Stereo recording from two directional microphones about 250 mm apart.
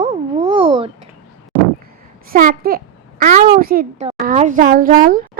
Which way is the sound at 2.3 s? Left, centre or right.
Right.